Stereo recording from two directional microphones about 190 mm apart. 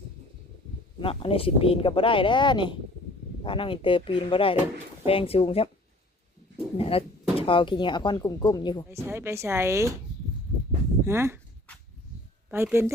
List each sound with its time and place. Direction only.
0.9 s speech: 30° left (ahead or behind)
6.7 s speech: 30° left (ahead or behind)
8.9 s speech: 15° right (ahead or behind)
11.0 s speech: 15° right (ahead or behind)
12.5 s speech: 10° right (ahead or behind)